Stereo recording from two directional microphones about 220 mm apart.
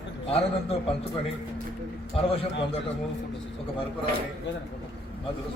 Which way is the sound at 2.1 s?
25° left (ahead or behind).